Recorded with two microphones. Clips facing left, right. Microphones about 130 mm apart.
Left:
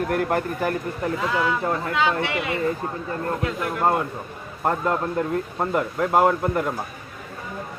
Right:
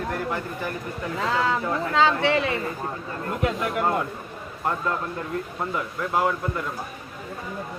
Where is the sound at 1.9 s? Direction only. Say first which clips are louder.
Right 6 dB; 30° right (ahead or behind).